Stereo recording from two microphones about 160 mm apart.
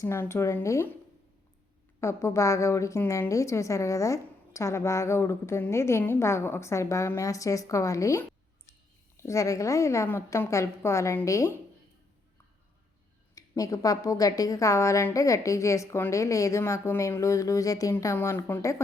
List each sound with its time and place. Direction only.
0.0 s speech: 15° left (ahead or behind)
2.0 s a woman's voice: 20° left (ahead or behind)
13.6 s a woman's voice: 20° left (ahead or behind)